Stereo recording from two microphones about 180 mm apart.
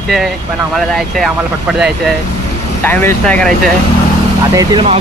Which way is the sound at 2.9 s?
10° left (ahead or behind).